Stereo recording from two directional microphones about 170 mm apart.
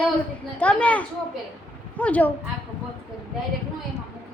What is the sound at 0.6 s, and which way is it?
Speech, 10° left (ahead or behind).